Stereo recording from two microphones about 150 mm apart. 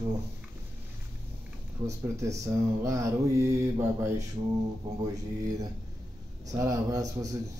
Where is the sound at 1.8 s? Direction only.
20° right (ahead or behind).